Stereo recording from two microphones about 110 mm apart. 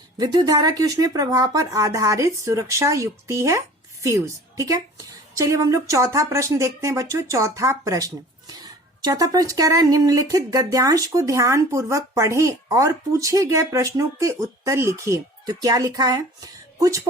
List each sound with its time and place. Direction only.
0.2 s a woman's voice: 40° right (ahead or behind)